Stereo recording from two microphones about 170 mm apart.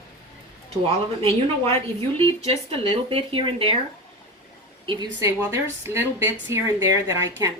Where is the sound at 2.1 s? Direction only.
30° right (ahead or behind).